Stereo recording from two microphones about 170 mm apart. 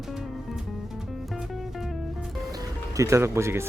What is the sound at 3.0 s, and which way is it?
Speech, 15° right (ahead or behind).